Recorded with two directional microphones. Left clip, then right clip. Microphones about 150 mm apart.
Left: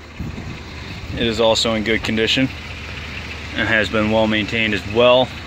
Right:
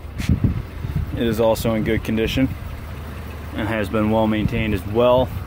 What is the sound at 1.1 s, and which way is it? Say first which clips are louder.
Speech: left 2 dB; 25° right (ahead or behind).